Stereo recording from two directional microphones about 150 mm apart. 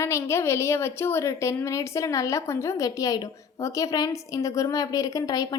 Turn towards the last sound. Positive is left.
turn(degrees=25)  # may be behind; listen again after turning